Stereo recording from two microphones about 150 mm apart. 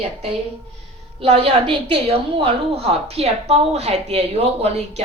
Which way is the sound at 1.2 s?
40° right (ahead or behind).